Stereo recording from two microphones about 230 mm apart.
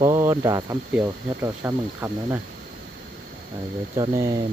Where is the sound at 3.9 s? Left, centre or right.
Centre.